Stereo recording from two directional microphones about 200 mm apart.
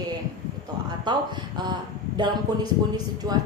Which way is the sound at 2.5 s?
20° right (ahead or behind).